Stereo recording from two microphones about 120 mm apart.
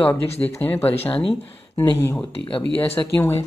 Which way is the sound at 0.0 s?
15° left (ahead or behind).